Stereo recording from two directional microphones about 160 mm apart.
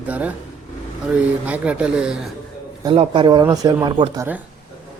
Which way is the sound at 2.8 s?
30° right (ahead or behind).